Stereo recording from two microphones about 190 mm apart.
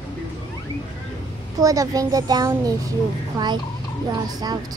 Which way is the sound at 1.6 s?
15° right (ahead or behind).